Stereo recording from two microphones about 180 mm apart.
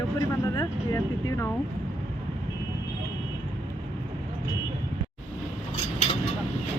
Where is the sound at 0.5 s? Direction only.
20° left (ahead or behind).